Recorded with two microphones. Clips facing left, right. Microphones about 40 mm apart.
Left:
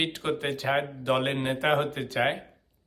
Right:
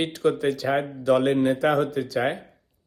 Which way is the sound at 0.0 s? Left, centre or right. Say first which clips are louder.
Right 6 dB; left.